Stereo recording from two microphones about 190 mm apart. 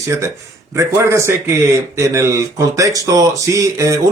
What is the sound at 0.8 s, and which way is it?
Speech, 15° right (ahead or behind).